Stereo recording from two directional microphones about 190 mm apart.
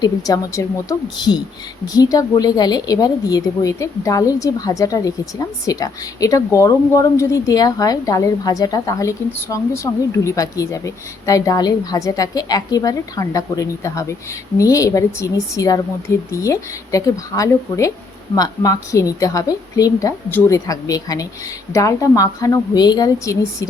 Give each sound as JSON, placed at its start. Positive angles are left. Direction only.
{"t": 0.0, "sound": "a woman's voice", "side_deg": 20}